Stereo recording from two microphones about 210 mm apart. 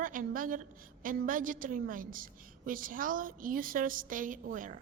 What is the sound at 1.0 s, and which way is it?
A woman's voice, 40° right (ahead or behind).